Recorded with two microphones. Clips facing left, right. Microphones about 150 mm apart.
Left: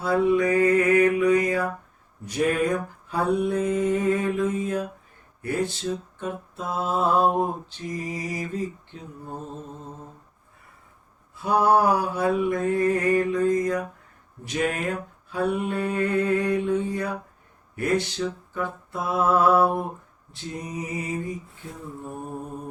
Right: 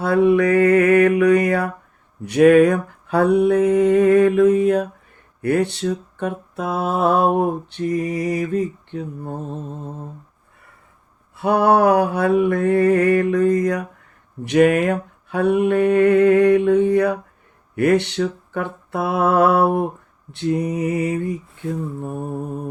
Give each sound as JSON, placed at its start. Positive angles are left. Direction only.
{"t": 0.0, "sound": "mantra", "side_deg": -70}
{"t": 2.2, "sound": "a sound", "side_deg": -75}
{"t": 5.4, "sound": "mantra", "side_deg": -70}
{"t": 11.3, "sound": "mantra", "side_deg": -70}